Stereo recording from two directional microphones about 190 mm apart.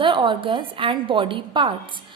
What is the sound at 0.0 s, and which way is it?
A woman's voice, 25° right (ahead or behind).